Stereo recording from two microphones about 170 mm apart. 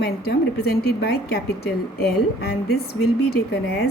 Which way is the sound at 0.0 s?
70° left (ahead or behind).